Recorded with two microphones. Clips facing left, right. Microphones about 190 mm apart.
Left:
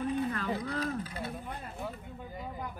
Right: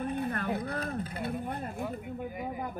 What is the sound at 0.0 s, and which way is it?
Speech, 55° right (ahead or behind).